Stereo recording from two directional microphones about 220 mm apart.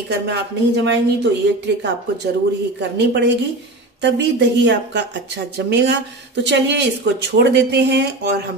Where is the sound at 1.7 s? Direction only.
50° right (ahead or behind).